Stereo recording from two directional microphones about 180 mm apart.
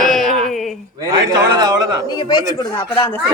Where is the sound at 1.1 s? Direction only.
20° right (ahead or behind).